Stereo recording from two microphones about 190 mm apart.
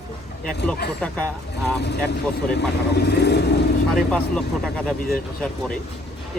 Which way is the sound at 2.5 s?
60° left (ahead or behind).